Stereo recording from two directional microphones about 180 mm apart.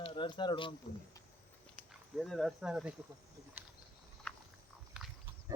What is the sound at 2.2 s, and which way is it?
Speech, centre (ahead or behind).